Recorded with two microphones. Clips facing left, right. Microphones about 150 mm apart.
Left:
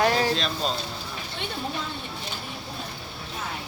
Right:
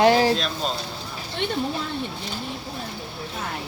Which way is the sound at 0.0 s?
25° right (ahead or behind).